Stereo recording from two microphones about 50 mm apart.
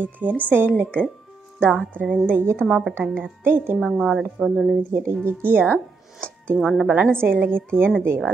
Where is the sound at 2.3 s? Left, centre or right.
Right.